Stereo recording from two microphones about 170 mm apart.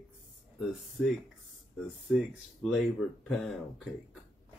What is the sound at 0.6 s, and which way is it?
Speech, centre (ahead or behind).